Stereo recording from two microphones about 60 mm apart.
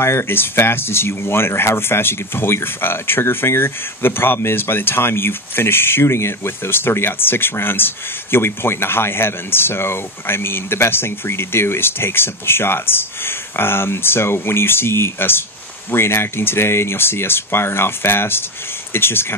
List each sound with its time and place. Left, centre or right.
0.0 s speech: left